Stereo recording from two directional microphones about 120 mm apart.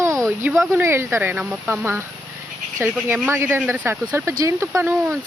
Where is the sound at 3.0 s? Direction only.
15° right (ahead or behind).